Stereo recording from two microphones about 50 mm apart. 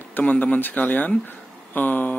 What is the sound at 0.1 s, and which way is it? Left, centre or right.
Speech, left.